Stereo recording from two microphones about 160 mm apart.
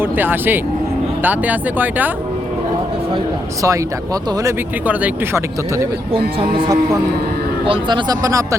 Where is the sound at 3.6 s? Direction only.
20° right (ahead or behind).